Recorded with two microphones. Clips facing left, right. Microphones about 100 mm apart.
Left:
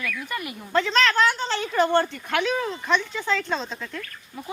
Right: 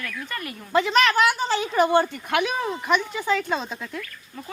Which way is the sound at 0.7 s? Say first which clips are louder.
Right 2 dB; 10° right (ahead or behind).